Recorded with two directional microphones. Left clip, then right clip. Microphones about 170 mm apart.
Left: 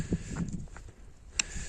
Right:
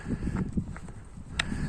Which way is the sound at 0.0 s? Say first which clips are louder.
Right 2 dB; 60° left (ahead or behind).